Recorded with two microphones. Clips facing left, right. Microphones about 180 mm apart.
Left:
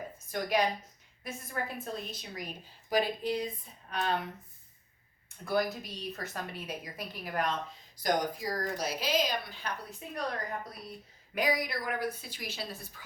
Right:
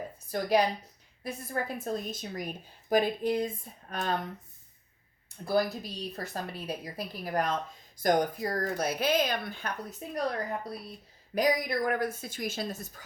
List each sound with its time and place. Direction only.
0.3 s a woman's voice: 35° right (ahead or behind)
5.5 s a woman's voice: 35° right (ahead or behind)
8.0 s speech: 55° right (ahead or behind)
11.3 s a woman's voice: 45° right (ahead or behind)